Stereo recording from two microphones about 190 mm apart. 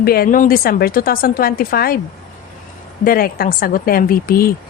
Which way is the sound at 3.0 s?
50° left (ahead or behind).